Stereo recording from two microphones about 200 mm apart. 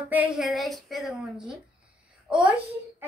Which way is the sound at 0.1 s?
5° right (ahead or behind).